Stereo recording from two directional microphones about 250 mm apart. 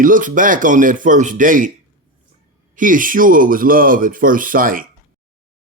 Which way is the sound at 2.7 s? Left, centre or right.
Right.